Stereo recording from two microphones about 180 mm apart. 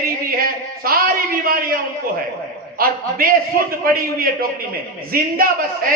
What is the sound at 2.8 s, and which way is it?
Speech, 55° right (ahead or behind).